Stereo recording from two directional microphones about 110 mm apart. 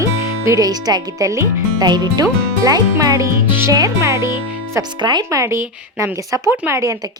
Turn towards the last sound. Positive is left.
turn(degrees=-25)  # may be behind; listen again after turning